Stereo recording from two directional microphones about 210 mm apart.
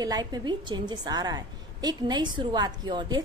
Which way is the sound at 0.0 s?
20° right (ahead or behind).